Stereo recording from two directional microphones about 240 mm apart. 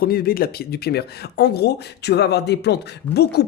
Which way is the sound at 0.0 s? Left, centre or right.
Left.